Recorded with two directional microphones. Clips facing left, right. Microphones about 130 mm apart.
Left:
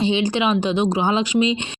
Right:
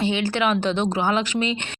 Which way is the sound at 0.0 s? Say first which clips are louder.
Left 3 dB; 20° left (ahead or behind).